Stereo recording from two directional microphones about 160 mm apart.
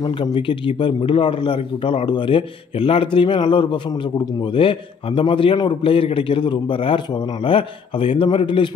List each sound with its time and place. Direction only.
0.0 s a man's voice: 30° left (ahead or behind)